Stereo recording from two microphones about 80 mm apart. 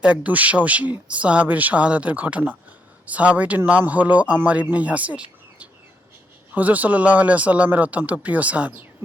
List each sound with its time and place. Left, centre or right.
0.0 s speech: centre